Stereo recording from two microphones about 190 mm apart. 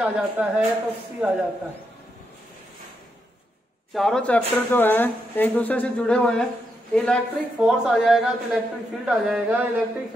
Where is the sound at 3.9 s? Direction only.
Centre (ahead or behind).